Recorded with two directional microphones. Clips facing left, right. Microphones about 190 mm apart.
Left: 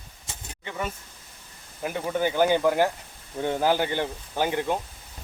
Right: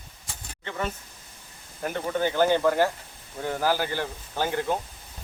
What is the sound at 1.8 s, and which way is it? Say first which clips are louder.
Speech: even; 10° left (ahead or behind).